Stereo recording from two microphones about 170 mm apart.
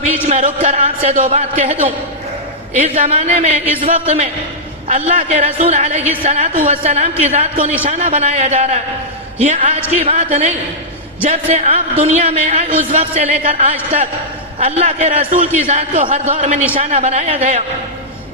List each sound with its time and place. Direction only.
0.3 s a man's voice: 45° right (ahead or behind)
3.0 s a man's voice: 40° right (ahead or behind)
11.3 s a man's voice: 40° right (ahead or behind)